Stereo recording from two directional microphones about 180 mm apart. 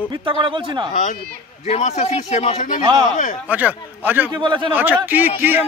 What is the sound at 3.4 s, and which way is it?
Speech, 10° right (ahead or behind).